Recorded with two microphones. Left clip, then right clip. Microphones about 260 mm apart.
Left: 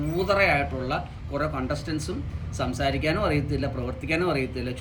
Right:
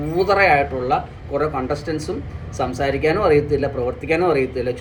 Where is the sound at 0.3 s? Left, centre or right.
Centre.